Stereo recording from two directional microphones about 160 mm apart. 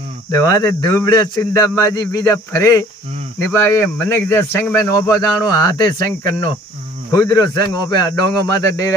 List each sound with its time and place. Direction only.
0.3 s a man's voice: 20° left (ahead or behind)